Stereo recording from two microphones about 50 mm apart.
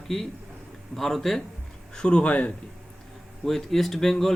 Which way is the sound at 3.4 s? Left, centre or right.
Centre.